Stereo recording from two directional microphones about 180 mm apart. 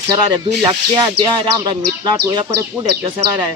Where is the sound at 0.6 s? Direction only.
25° right (ahead or behind).